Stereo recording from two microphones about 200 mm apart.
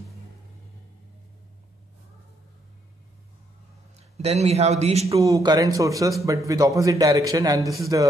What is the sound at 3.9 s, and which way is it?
A man's voice, 30° right (ahead or behind).